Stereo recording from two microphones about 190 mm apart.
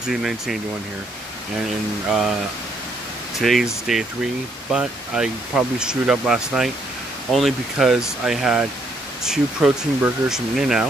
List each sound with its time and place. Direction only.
0.0 s speech: 5° right (ahead or behind)
2.0 s speech: centre (ahead or behind)
3.3 s speech: centre (ahead or behind)